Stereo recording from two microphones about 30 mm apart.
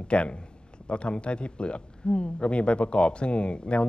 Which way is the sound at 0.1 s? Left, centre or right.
Left.